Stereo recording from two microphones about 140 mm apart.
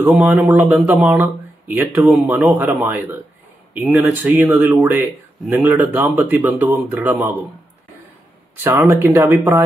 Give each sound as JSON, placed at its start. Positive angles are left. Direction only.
{"t": 0.0, "sound": "speech", "side_deg": -15}
{"t": 8.6, "sound": "speech", "side_deg": -15}